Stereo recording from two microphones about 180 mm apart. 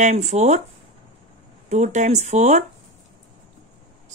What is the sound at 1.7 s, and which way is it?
Speech, 40° right (ahead or behind).